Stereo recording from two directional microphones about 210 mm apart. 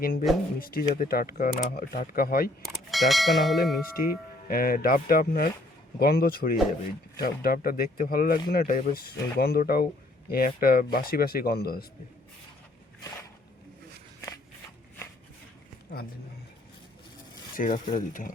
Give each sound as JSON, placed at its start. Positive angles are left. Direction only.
{"t": 0.0, "sound": "speech", "side_deg": 45}
{"t": 2.6, "sound": "speech", "side_deg": 0}
{"t": 4.4, "sound": "speech", "side_deg": 45}
{"t": 17.5, "sound": "speech", "side_deg": 40}